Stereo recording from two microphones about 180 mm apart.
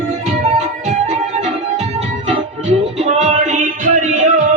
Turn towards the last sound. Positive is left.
turn(degrees=-45)  # may be behind; listen again after turning